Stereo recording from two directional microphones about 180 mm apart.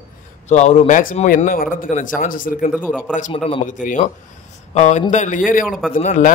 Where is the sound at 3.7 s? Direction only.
45° left (ahead or behind).